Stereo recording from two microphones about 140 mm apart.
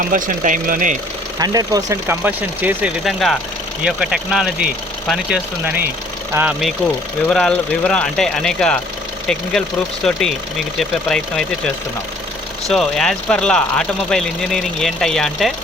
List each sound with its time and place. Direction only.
0.0 s speech: 75° right (ahead or behind)
1.4 s speech: 25° right (ahead or behind)
3.0 s speech: centre (ahead or behind)
7.3 s speech: 5° left (ahead or behind)